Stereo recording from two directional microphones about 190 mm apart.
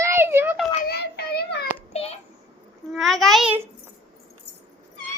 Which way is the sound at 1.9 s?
35° left (ahead or behind).